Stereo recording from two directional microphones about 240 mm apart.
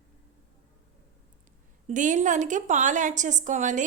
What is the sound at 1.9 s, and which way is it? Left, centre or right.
A woman's voice, right.